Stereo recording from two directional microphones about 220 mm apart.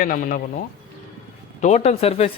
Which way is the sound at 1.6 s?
30° left (ahead or behind).